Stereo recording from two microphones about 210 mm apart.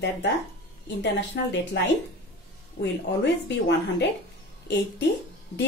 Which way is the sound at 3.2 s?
55° left (ahead or behind).